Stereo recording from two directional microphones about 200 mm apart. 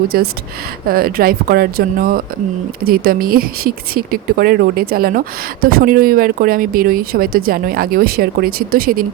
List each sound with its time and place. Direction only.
0.1 s speech: 50° right (ahead or behind)